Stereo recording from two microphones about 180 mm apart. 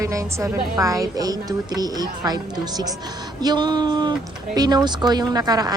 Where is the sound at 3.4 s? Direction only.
20° right (ahead or behind).